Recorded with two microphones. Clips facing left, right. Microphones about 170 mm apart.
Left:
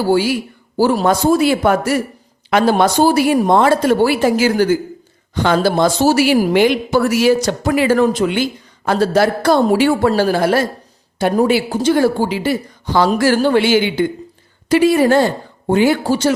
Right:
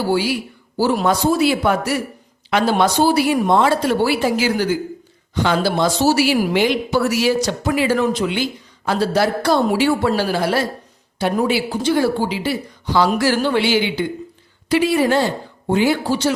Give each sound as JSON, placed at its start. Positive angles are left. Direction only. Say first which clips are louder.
{"t": 0.1, "sound": "a woman's voice", "louder": "left 4 dB", "side_deg": 45}